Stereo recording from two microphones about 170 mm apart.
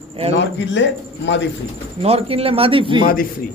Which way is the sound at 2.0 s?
35° right (ahead or behind).